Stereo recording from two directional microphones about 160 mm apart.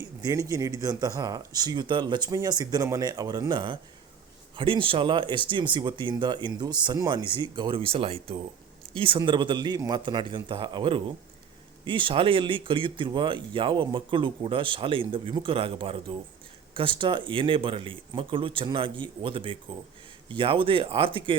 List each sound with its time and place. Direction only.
0.2 s speech: 20° right (ahead or behind)